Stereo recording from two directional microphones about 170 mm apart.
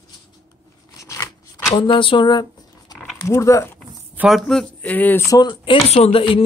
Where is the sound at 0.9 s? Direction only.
20° left (ahead or behind).